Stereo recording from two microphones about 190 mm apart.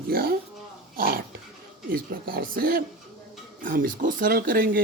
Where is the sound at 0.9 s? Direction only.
50° right (ahead or behind).